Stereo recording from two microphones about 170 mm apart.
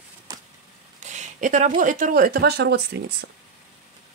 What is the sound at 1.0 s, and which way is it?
Speech, 45° right (ahead or behind).